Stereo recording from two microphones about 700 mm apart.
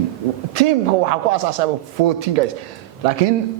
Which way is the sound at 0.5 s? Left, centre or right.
Right.